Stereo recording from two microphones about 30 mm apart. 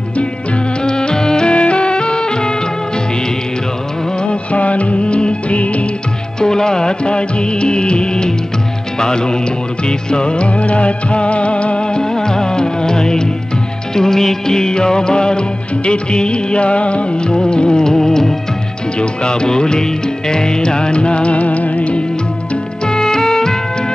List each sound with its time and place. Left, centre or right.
0.8 s music: left
1.5 s music: left
4.2 s music: left
6.4 s music: left
12.0 s music: left
17.3 s music: left
18.9 s music: left
22.8 s music: left